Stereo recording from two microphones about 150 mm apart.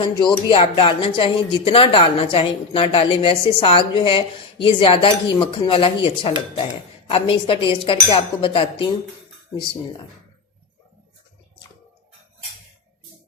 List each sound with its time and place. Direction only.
0.0 s speech: 30° left (ahead or behind)